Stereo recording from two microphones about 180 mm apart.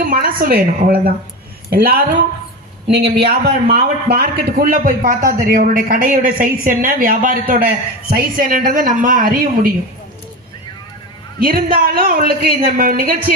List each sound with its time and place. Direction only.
0.1 s a woman's voice: 55° right (ahead or behind)
11.3 s a man's voice: 55° right (ahead or behind)